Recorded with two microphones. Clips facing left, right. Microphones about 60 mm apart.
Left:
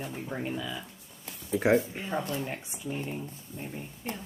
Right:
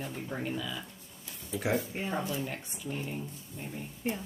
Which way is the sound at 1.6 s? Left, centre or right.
Left.